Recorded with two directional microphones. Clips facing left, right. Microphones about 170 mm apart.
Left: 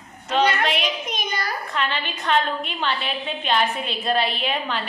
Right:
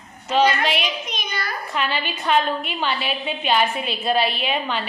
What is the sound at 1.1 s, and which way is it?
Speech, 45° left (ahead or behind).